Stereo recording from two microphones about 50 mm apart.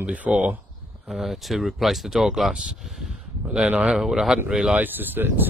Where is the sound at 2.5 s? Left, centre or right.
Centre.